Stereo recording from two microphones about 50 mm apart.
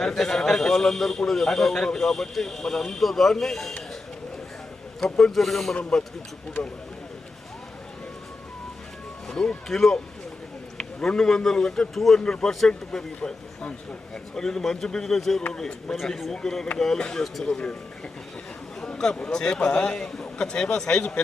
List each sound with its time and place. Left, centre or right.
0.0 s a man's voice: centre
4.9 s a man's voice: centre
5.7 s a man's voice: centre
9.2 s a man's voice: centre
13.1 s a man's voice: left
14.3 s a man's voice: centre
18.8 s a sound: centre
19.3 s a man's voice: centre